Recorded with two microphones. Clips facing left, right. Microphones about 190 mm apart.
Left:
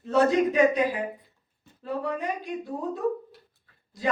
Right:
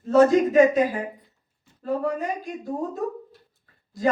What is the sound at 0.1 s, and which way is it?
Speech, 45° right (ahead or behind).